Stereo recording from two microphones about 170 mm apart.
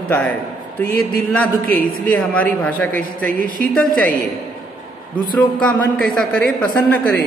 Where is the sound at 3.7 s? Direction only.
5° left (ahead or behind).